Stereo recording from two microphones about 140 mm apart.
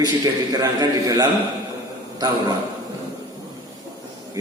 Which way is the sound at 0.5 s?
25° right (ahead or behind).